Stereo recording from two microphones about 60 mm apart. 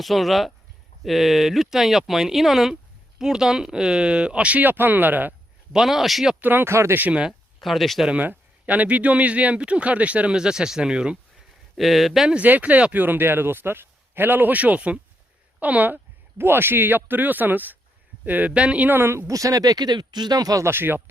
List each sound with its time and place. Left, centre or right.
0.0 s speech: centre; by 5.3 s right
5.7 s speech: centre
6.4 s speech: right
7.1 s speech: centre
7.6 s speech: centre
8.1 s speech: right
10.3 s speech: centre
11.8 s speech: centre
12.3 s speech: right
16.4 s speech: right; by 18.9 s centre
18.9 s speech: right
19.3 s speech: right
20.7 s speech: right